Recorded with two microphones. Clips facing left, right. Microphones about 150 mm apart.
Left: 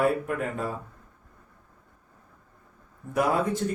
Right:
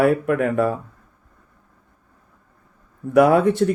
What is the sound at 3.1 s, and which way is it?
Speech, 70° right (ahead or behind).